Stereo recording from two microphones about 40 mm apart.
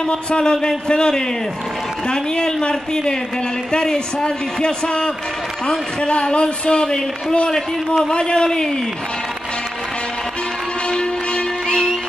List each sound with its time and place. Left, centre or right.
0.0 s a man's voice: left
10.9 s music: centre